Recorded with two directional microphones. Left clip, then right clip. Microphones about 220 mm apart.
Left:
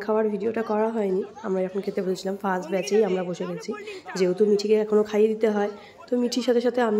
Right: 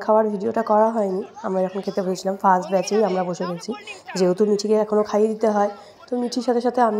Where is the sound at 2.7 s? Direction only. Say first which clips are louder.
Right 3 dB; 5° left (ahead or behind).